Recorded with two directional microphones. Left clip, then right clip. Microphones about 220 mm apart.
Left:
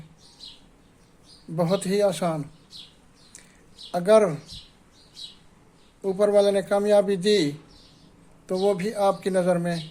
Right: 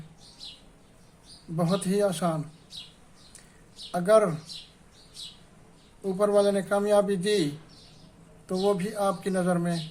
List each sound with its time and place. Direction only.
1.5 s a man's voice: 30° left (ahead or behind)
3.9 s a man's voice: 30° left (ahead or behind)
6.0 s a man's voice: 25° left (ahead or behind)